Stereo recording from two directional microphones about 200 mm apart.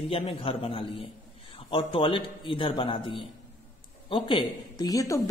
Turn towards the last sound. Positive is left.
turn(degrees=15)  # may be behind; listen again after turning